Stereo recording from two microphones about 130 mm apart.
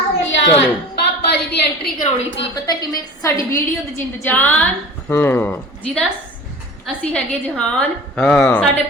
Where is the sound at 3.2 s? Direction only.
20° left (ahead or behind).